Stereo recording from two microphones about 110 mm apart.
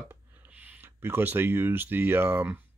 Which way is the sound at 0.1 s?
15° right (ahead or behind).